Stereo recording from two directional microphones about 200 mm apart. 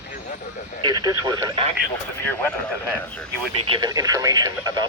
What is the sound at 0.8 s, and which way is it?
Speech, 20° right (ahead or behind).